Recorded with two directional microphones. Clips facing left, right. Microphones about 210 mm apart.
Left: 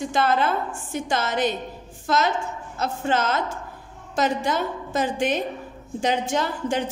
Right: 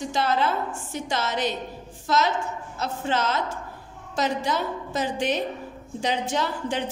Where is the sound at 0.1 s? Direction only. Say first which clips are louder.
Left 2 dB; 55° left (ahead or behind).